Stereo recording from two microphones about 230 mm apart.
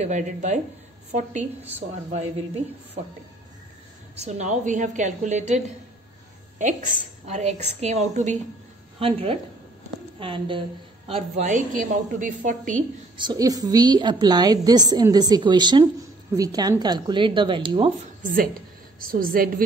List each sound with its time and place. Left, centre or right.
0.0 s a woman's voice: right
4.2 s a woman's voice: right
7.3 s a woman's voice: right
13.2 s a woman's voice: centre
18.9 s a woman's voice: right